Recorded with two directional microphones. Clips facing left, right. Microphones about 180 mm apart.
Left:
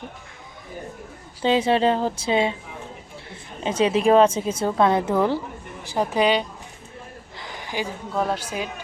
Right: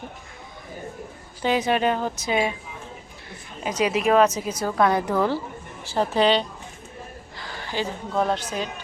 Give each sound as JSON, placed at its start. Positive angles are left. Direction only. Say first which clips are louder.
{"t": 1.4, "sound": "a woman's voice", "louder": "left 3 dB", "side_deg": 25}
{"t": 3.6, "sound": "a woman's voice", "louder": "left 3 dB", "side_deg": 25}
{"t": 7.3, "sound": "a sound", "louder": "even", "side_deg": 20}
{"t": 8.1, "sound": "a woman's voice", "louder": "right 1 dB", "side_deg": 5}